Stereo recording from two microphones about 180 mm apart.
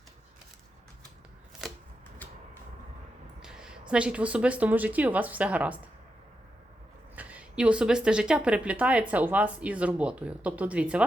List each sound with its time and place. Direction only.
1.6 s a sound: centre (ahead or behind)
3.4 s speech: 5° right (ahead or behind)
7.2 s speech: 10° right (ahead or behind)